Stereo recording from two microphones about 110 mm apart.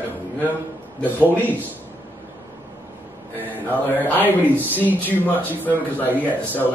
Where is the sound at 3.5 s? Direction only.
15° right (ahead or behind).